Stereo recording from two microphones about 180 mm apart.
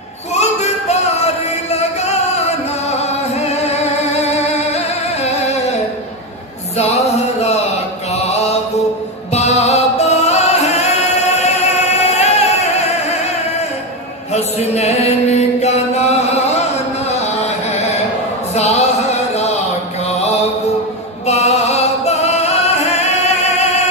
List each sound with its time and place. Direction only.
0.3 s music: 40° left (ahead or behind)
6.8 s music: 35° left (ahead or behind)
9.3 s music: 35° left (ahead or behind)
14.3 s chant: 35° left (ahead or behind)
18.5 s a sound: 35° left (ahead or behind)
21.3 s singing: 40° left (ahead or behind)